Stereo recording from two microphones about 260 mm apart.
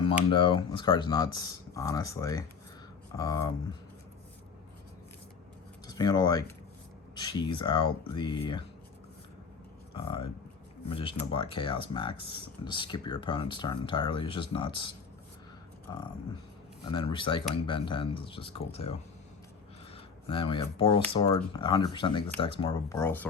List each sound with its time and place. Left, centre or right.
0.3 s speech: centre
5.9 s speech: centre
9.9 s speech: centre
16.8 s speech: centre
20.2 s speech: centre